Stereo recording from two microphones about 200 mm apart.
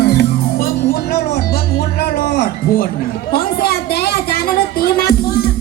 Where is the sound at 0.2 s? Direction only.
50° left (ahead or behind).